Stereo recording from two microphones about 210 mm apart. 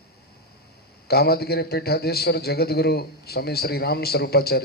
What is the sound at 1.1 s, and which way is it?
A man's voice, 50° left (ahead or behind).